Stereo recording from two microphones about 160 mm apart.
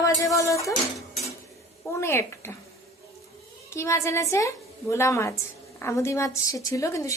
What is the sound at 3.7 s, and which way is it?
A woman's voice, 20° left (ahead or behind).